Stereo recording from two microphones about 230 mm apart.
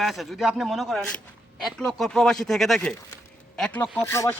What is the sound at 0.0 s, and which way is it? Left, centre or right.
Speech, centre.